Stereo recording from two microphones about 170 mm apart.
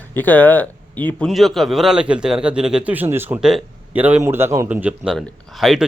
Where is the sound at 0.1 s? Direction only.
10° left (ahead or behind).